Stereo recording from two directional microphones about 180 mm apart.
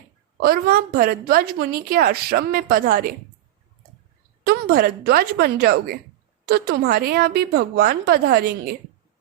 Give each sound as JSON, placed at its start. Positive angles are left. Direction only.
{"t": 0.3, "sound": "a woman's voice", "side_deg": -55}
{"t": 4.4, "sound": "a woman's voice", "side_deg": -60}